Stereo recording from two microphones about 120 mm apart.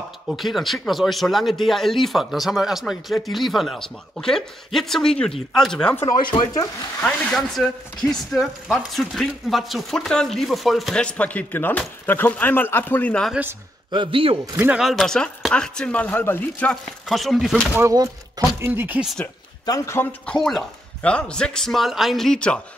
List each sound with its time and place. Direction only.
0.3 s speech: centre (ahead or behind)
6.3 s speech: 50° left (ahead or behind)
7.3 s a man's voice: 5° left (ahead or behind)
13.3 s speech: 15° right (ahead or behind)
13.9 s speech: 50° right (ahead or behind)
14.8 s a man's voice: centre (ahead or behind)
17.9 s speech: 30° right (ahead or behind)
19.6 s a man's voice: 30° left (ahead or behind); by 22.6 s 5° left (ahead or behind)